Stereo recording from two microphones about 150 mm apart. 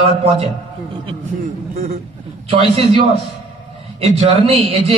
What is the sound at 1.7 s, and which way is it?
Speech, 60° right (ahead or behind).